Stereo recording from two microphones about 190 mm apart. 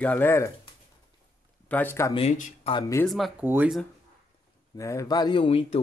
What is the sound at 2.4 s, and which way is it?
Speech, 30° left (ahead or behind).